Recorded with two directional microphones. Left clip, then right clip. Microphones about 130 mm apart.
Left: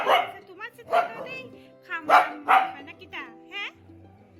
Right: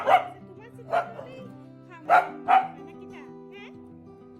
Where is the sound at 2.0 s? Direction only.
30° right (ahead or behind).